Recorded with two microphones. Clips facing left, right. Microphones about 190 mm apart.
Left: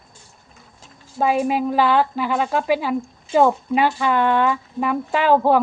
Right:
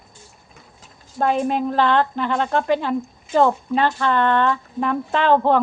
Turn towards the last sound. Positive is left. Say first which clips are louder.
# left 1 dB
turn(degrees=5)  # may be behind; listen again after turning